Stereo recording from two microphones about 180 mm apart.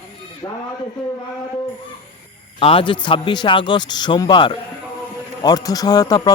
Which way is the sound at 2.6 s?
30° left (ahead or behind).